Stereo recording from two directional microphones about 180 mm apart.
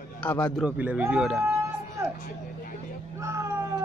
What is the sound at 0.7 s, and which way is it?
Speech, 10° right (ahead or behind).